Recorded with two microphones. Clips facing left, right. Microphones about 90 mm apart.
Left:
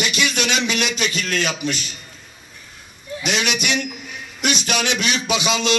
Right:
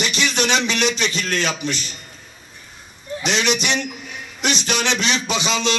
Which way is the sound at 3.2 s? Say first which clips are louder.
Right 2 dB; 40° right (ahead or behind).